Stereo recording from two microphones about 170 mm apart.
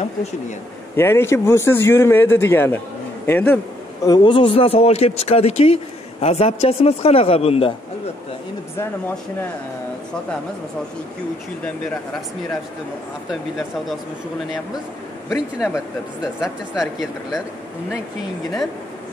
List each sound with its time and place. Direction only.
0.9 s speech: 15° left (ahead or behind)
4.0 s speech: 25° left (ahead or behind)
13.3 s speech: centre (ahead or behind)
15.7 s speech: 5° right (ahead or behind)